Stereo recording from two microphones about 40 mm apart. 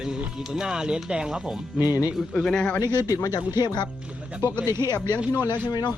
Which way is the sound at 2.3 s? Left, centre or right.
Centre.